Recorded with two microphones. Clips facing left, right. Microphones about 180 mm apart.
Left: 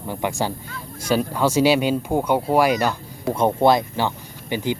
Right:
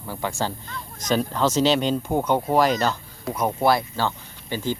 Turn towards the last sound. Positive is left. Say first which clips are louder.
# left 3 dB
turn(degrees=15)  # may be behind; listen again after turning